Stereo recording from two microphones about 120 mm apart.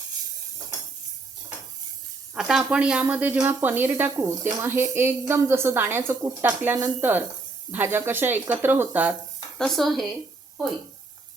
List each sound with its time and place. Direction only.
2.3 s a woman's voice: 5° right (ahead or behind)
9.6 s speech: 5° left (ahead or behind)